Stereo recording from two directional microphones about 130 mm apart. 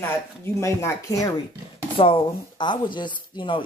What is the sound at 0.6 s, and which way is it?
Speech, 25° left (ahead or behind).